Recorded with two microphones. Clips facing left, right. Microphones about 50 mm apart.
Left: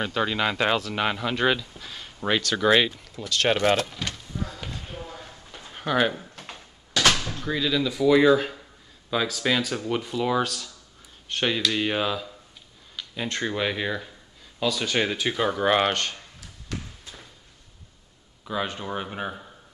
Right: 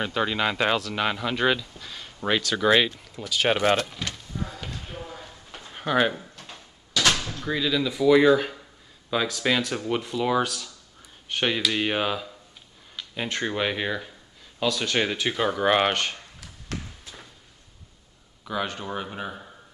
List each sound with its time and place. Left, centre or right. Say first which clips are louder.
0.0 s speech: even; centre
5.0 s a sound: even; centre
6.4 s a sound: left 2 dB; left
7.2 s speech: even; centre
14.6 s speech: even; centre
18.6 s speech: even; centre
19.0 s speech: left 2 dB; left